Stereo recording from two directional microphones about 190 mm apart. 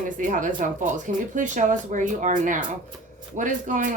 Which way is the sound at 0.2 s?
45° right (ahead or behind).